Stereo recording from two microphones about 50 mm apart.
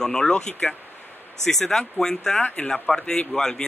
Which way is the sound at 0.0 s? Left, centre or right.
Centre.